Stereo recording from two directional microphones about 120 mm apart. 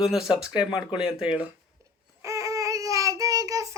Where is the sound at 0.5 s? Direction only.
40° left (ahead or behind).